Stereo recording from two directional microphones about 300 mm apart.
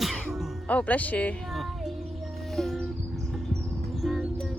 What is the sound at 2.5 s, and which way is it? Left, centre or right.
Music, centre.